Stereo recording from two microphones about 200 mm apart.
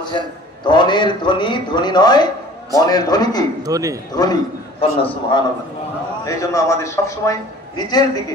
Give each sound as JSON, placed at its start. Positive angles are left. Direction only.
{"t": 0.7, "sound": "a man's voice", "side_deg": 20}
{"t": 3.6, "sound": "a man's voice", "side_deg": -15}
{"t": 4.1, "sound": "a man's voice", "side_deg": 20}
{"t": 6.2, "sound": "a man's voice", "side_deg": 15}